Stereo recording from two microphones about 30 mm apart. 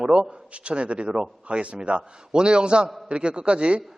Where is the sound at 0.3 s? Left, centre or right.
Right.